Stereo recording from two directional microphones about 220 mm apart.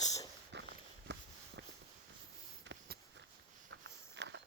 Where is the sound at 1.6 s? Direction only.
50° right (ahead or behind).